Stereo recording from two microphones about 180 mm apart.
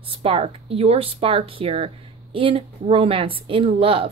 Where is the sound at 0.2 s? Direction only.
30° right (ahead or behind).